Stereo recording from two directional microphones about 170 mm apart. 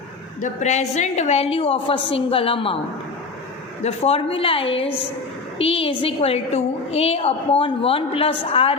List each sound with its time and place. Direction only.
0.4 s a woman's voice: 40° left (ahead or behind)
3.8 s a woman's voice: 35° left (ahead or behind)